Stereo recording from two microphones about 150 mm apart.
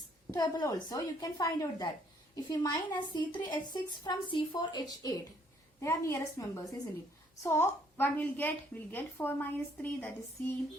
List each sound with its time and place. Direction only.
0.3 s a woman's voice: 25° left (ahead or behind)